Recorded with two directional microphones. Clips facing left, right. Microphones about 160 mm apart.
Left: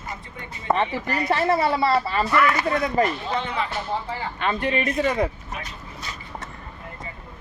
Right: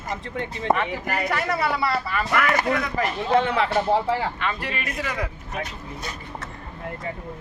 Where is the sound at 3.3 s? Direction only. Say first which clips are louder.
Right 7 dB; 75° right (ahead or behind).